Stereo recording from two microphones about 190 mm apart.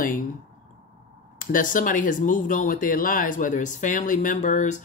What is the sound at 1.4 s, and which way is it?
Speech, 45° left (ahead or behind).